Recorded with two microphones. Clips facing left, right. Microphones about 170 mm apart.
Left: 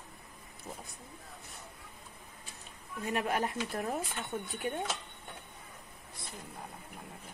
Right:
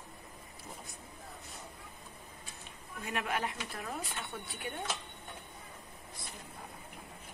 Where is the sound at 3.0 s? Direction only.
35° left (ahead or behind).